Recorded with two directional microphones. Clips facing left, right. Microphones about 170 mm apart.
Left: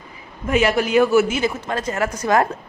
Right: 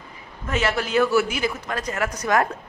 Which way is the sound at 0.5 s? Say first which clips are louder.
Left 6 dB; 15° left (ahead or behind).